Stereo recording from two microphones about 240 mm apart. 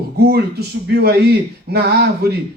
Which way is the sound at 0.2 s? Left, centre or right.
Right.